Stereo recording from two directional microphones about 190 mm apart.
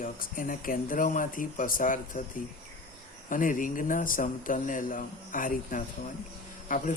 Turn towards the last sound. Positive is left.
turn(degrees=45)  # may be behind; listen again after turning